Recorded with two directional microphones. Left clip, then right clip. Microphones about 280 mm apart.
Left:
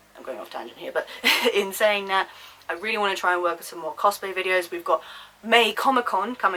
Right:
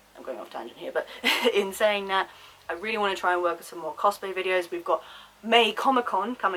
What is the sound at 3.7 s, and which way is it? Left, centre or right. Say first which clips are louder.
Speech: left 2 dB; centre.